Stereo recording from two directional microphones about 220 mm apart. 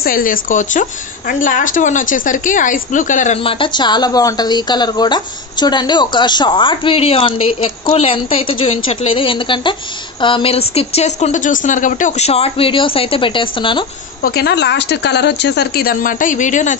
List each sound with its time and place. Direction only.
0.0 s speech: 40° left (ahead or behind); by 13.8 s 20° left (ahead or behind)
14.2 s speech: 45° left (ahead or behind)